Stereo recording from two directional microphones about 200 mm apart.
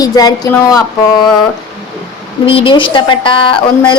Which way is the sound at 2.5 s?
25° left (ahead or behind).